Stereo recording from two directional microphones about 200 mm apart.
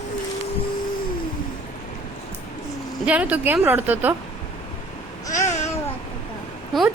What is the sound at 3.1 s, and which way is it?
Speech, 5° right (ahead or behind).